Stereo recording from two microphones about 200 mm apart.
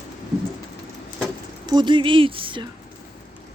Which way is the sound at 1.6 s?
20° right (ahead or behind).